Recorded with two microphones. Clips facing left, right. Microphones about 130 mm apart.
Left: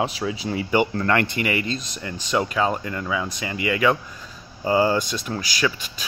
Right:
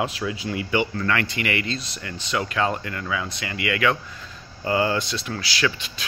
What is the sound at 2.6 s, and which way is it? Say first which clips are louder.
Speech: left 2 dB; 10° left (ahead or behind).